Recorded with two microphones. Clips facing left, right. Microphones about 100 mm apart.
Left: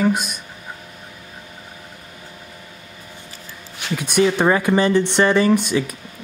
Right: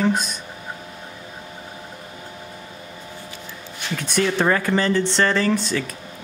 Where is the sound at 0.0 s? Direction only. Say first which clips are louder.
Left 2 dB; 10° left (ahead or behind).